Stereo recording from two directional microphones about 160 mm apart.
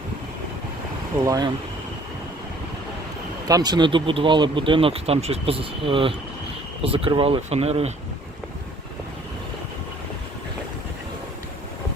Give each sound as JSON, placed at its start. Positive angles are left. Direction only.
{"t": 1.2, "sound": "speech", "side_deg": -25}
{"t": 3.4, "sound": "speech", "side_deg": -25}